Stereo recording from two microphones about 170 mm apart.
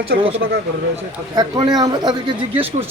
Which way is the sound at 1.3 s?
25° right (ahead or behind).